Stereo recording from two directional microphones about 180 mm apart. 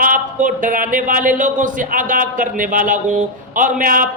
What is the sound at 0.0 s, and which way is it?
Speech, 50° right (ahead or behind).